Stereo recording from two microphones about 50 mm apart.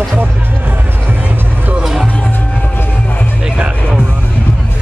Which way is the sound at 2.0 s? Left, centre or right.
Left.